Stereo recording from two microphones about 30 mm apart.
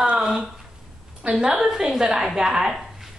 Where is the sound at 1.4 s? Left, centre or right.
Centre.